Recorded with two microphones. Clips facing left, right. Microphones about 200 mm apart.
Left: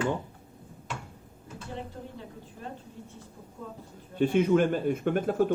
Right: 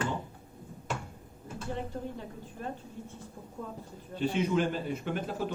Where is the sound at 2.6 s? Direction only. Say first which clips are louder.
Right 3 dB; 50° right (ahead or behind).